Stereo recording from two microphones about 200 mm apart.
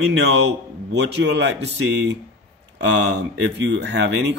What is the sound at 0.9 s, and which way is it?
Speech, 60° right (ahead or behind).